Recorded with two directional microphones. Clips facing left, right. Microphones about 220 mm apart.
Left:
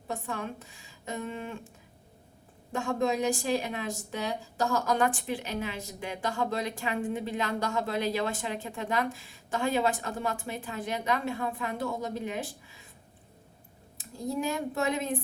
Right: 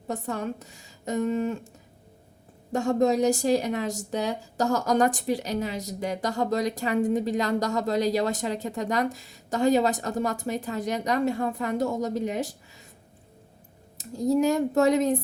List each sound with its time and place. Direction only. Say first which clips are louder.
0.1 s a woman's voice: right 5 dB; 40° right (ahead or behind)
2.7 s a woman's voice: right 6 dB; 40° right (ahead or behind)
14.0 s a woman's voice: right 9 dB; 40° right (ahead or behind)